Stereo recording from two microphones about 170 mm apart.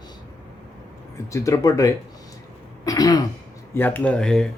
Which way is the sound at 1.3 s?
20° left (ahead or behind).